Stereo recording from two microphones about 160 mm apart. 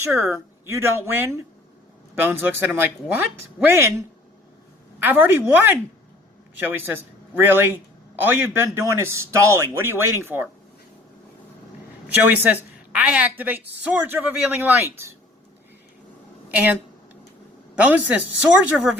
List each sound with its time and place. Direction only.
0.1 s a woman's voice: 15° right (ahead or behind)
4.9 s a woman's voice: 10° right (ahead or behind)
12.0 s a woman's voice: 10° right (ahead or behind)
17.7 s a woman's voice: 10° right (ahead or behind)